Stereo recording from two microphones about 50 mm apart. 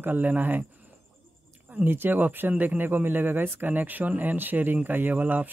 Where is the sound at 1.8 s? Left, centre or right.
Right.